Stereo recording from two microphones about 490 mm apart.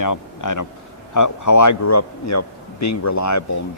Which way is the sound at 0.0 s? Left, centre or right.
Left.